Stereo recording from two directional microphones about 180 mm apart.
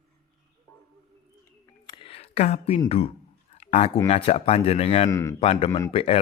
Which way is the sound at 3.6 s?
35° left (ahead or behind).